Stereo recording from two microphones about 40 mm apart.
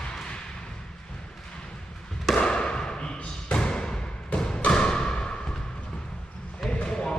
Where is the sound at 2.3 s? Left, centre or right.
Left.